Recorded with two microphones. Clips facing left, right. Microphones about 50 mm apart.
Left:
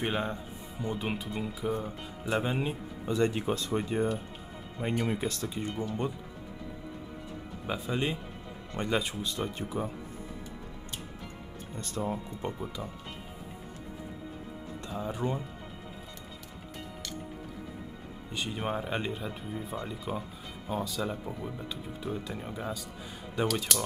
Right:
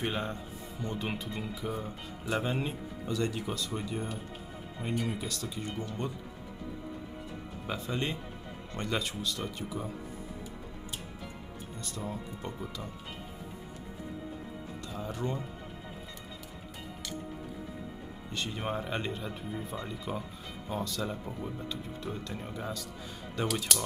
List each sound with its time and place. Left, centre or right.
0.0 s speech: centre
3.1 s speech: left
7.6 s speech: centre; by 9.8 s left
11.8 s speech: left
14.9 s speech: centre
18.3 s speech: centre